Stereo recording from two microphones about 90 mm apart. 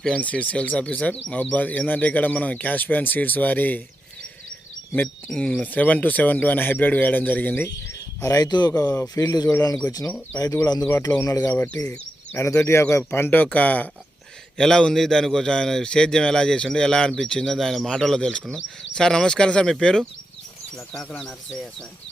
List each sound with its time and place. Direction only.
0.0 s a man's voice: 10° left (ahead or behind)
5.3 s a man's voice: 10° left (ahead or behind)
7.9 s bird: 35° left (ahead or behind)
8.8 s speech: 30° left (ahead or behind)
9.2 s speech: 50° left (ahead or behind)
11.3 s a man's voice: 20° left (ahead or behind)
12.4 s speech: 30° left (ahead or behind)
14.6 s a man's voice: 5° left (ahead or behind)